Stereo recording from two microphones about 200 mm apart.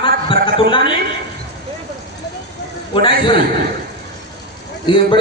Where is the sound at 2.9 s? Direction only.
25° left (ahead or behind).